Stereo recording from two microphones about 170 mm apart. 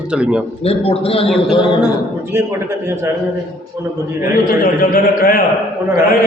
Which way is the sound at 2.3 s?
15° right (ahead or behind).